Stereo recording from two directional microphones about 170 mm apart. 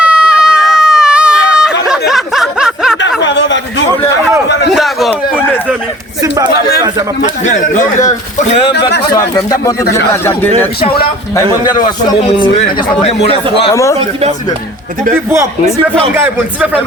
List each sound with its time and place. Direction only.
0.0 s a sound: 5° right (ahead or behind)
3.2 s a sound: 90° left
4.7 s a sound: centre (ahead or behind)
6.2 s speech: 25° right (ahead or behind)
7.4 s speech: 45° left (ahead or behind)
9.1 s a man's voice: 20° left (ahead or behind)
11.3 s a man's voice: 25° left (ahead or behind)
12.5 s speech: 35° left (ahead or behind)
15.1 s speech: 15° right (ahead or behind)